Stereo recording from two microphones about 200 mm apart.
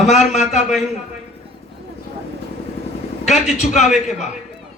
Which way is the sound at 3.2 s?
35° left (ahead or behind).